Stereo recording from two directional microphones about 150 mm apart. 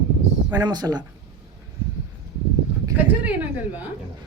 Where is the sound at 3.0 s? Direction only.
10° right (ahead or behind).